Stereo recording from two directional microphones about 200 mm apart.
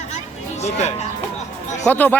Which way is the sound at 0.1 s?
35° left (ahead or behind).